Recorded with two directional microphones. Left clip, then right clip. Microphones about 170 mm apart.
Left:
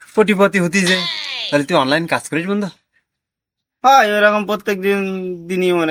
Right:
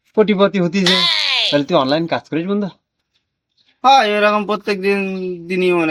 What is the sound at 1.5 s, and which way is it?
Speech, 15° left (ahead or behind).